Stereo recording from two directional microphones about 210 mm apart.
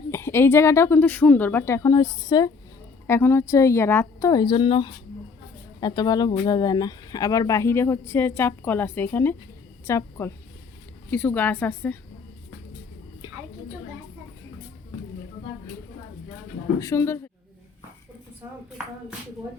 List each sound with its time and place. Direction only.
0.1 s a woman's voice: 10° left (ahead or behind)
13.2 s a sound: 25° left (ahead or behind)
16.8 s speech: 15° left (ahead or behind)